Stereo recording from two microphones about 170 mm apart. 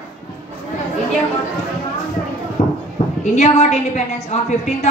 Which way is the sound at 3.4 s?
40° left (ahead or behind).